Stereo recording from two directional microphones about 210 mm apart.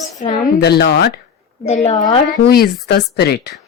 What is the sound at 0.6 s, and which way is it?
Speech, 50° left (ahead or behind).